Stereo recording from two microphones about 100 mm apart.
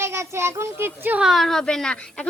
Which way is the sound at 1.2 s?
Centre (ahead or behind).